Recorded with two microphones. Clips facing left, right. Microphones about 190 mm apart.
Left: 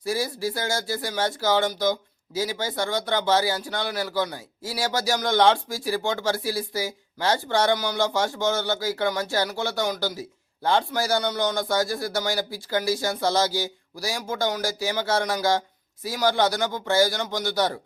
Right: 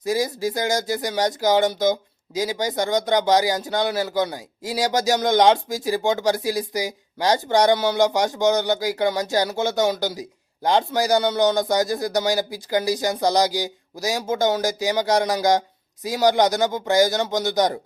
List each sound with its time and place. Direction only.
0.0 s a man's voice: 20° right (ahead or behind)